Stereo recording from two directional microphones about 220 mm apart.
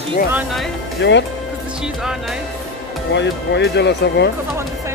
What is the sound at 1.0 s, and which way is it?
Speech, 55° left (ahead or behind).